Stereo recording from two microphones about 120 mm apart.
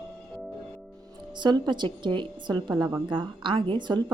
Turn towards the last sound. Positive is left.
turn(degrees=-40)  # may be behind; listen again after turning